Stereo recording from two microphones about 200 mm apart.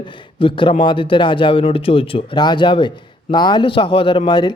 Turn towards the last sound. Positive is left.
turn(degrees=20)  # may be behind; listen again after turning